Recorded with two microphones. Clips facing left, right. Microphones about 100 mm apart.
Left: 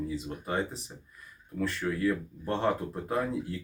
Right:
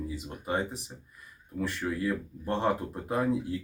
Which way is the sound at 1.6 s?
15° right (ahead or behind).